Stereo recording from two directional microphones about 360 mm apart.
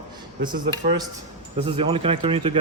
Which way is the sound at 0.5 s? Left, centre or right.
Right.